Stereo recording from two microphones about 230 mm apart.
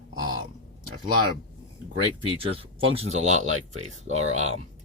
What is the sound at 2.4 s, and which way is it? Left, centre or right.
Speech, right.